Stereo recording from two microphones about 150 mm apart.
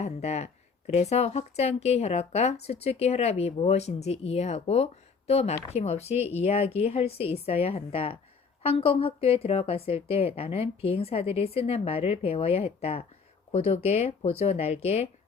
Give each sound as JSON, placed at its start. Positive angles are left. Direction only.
{"t": 0.0, "sound": "speech", "side_deg": 45}